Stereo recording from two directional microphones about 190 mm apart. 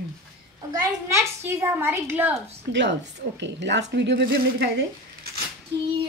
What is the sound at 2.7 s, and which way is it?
A woman's voice, 70° right (ahead or behind).